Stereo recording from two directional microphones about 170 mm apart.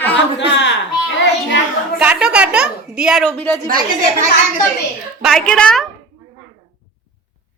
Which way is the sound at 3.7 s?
55° right (ahead or behind).